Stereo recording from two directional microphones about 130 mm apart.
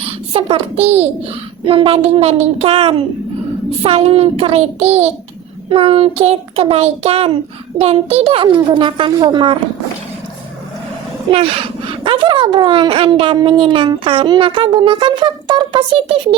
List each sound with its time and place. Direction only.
0.0 s a child's voice: 50° right (ahead or behind)
11.3 s speech: 45° right (ahead or behind)